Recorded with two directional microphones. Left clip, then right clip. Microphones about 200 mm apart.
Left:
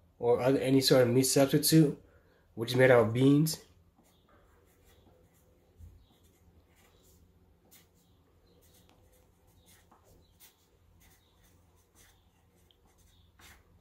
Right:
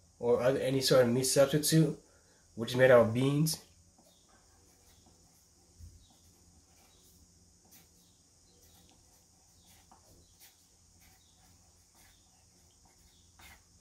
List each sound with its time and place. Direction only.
0.2 s speech: 25° left (ahead or behind)